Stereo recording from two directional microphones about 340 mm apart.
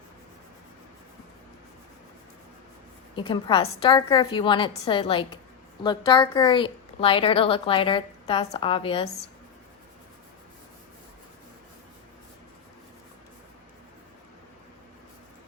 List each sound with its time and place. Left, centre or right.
3.2 s a woman's voice: centre